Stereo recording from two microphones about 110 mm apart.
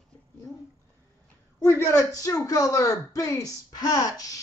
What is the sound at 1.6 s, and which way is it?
Speech, 25° left (ahead or behind).